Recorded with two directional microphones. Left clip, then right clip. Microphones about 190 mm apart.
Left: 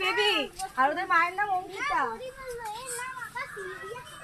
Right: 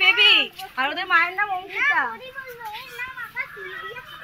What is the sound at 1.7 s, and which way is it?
Speech, centre (ahead or behind).